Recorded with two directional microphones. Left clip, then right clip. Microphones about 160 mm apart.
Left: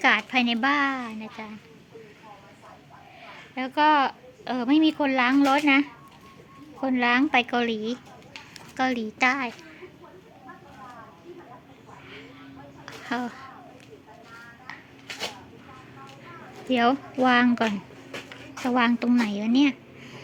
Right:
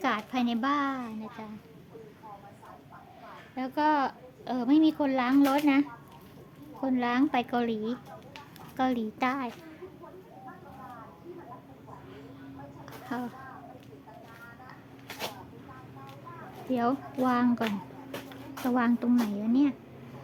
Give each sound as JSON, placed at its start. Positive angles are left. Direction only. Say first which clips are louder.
{"t": 0.0, "sound": "a woman's voice", "louder": "left 8 dB", "side_deg": 10}
{"t": 3.2, "sound": "a woman's voice", "louder": "left 4 dB", "side_deg": 10}
{"t": 12.8, "sound": "a sound", "louder": "left 7 dB", "side_deg": 15}
{"t": 16.7, "sound": "a woman's voice", "louder": "left 7 dB", "side_deg": 10}
{"t": 18.7, "sound": "a woman's voice", "louder": "left 5 dB", "side_deg": -5}